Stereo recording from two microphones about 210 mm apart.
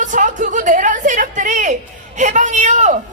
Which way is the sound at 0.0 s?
35° right (ahead or behind).